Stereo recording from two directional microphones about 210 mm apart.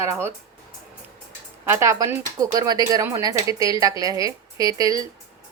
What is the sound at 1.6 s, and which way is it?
Speech, 10° right (ahead or behind).